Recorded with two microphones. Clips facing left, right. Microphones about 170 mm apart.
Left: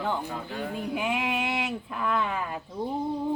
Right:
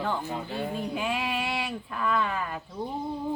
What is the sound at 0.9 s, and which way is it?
Speech, 15° left (ahead or behind).